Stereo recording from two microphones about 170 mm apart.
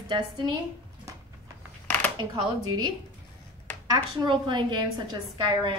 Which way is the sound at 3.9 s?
25° right (ahead or behind).